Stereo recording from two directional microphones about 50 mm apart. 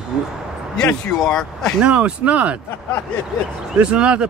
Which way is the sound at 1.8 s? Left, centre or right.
Right.